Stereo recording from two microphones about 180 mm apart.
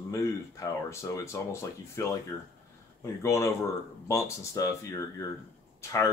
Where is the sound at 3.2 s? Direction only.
15° left (ahead or behind).